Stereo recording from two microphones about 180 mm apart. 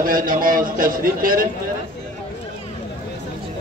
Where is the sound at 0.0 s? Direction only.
50° right (ahead or behind).